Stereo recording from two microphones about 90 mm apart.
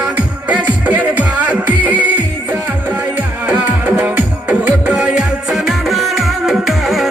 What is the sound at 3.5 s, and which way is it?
Music, 15° right (ahead or behind).